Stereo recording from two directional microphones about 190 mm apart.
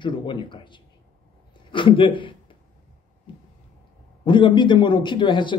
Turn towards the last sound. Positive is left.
turn(degrees=25)  # may be behind; listen again after turning